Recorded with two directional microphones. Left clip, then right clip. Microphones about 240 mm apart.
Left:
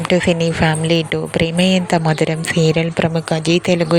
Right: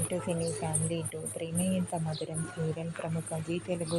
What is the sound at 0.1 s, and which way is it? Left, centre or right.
Speech, left.